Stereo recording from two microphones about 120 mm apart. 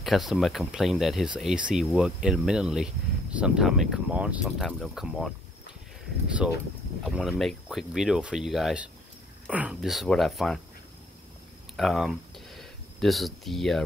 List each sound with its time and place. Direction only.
0.0 s speech: centre (ahead or behind)
9.8 s speech: centre (ahead or behind)
11.7 s a sound: centre (ahead or behind)